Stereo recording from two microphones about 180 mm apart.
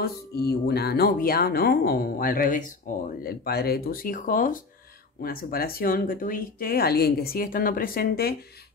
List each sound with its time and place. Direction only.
0.0 s speech: 60° left (ahead or behind)